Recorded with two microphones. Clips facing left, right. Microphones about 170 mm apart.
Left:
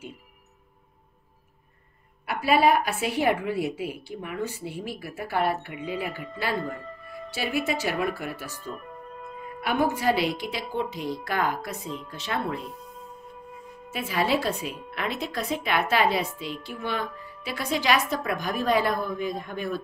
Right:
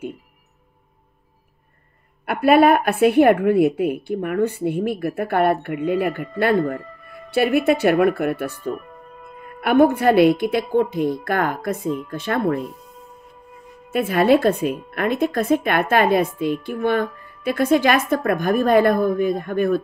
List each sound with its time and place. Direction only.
2.2 s a woman's voice: 55° right (ahead or behind)
13.9 s speech: 55° right (ahead or behind)